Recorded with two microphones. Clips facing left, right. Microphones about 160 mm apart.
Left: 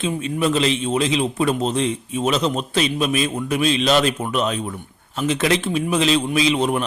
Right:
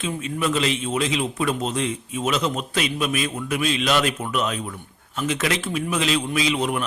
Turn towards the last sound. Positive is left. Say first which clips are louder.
# left 4 dB
turn(degrees=30)  # may be behind; listen again after turning